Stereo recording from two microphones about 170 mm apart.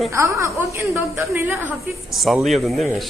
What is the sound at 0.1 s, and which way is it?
A woman's voice, 15° right (ahead or behind).